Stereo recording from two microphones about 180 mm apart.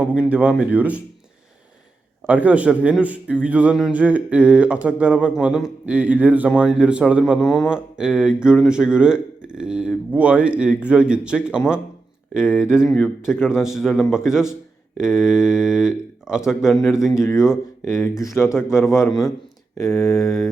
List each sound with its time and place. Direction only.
0.0 s a man's voice: 5° right (ahead or behind)
2.2 s a man's voice: 5° right (ahead or behind)
17.2 s speech: 15° left (ahead or behind)
18.1 s speech: centre (ahead or behind)
18.7 s speech: 15° left (ahead or behind)
20.2 s speech: centre (ahead or behind)